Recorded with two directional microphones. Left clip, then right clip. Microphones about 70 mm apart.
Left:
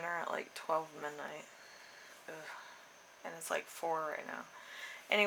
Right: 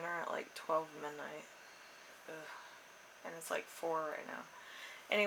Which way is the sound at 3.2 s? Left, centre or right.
Left.